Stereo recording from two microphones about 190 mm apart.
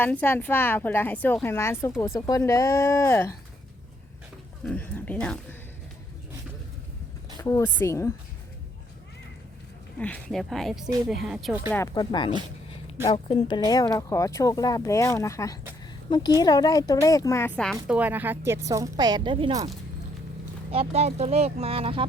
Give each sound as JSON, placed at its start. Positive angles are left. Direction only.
{"t": 0.0, "sound": "speech", "side_deg": 10}
{"t": 4.6, "sound": "speech", "side_deg": 10}
{"t": 7.3, "sound": "speech", "side_deg": 15}
{"t": 10.0, "sound": "speech", "side_deg": 5}
{"t": 11.9, "sound": "speech", "side_deg": 25}
{"t": 13.7, "sound": "speech", "side_deg": 20}
{"t": 17.8, "sound": "speech", "side_deg": -10}